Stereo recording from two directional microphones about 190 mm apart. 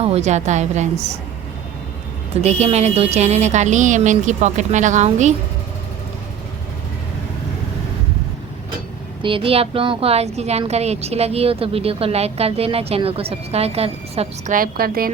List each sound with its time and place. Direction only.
0.0 s a woman's voice: 35° right (ahead or behind)
2.3 s a woman's voice: 35° right (ahead or behind)
9.2 s a woman's voice: 30° right (ahead or behind)
14.5 s a woman's voice: 50° right (ahead or behind)